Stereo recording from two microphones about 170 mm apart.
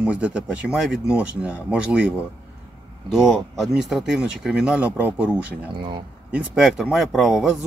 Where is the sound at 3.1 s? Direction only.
Centre (ahead or behind).